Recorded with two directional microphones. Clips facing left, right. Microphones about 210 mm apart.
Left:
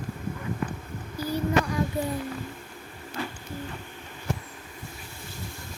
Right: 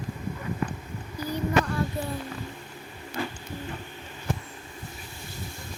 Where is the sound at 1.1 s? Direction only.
10° left (ahead or behind).